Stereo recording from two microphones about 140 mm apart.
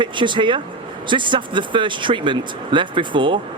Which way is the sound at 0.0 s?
35° right (ahead or behind).